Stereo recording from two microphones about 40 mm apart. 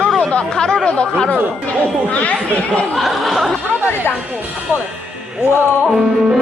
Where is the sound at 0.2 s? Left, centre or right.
Left.